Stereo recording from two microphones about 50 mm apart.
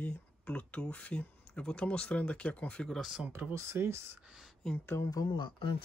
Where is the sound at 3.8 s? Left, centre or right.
Right.